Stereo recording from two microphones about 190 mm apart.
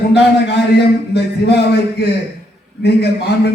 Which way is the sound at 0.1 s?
60° left (ahead or behind).